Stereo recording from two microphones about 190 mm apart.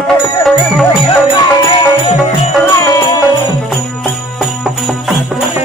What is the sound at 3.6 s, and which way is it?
Music, centre (ahead or behind).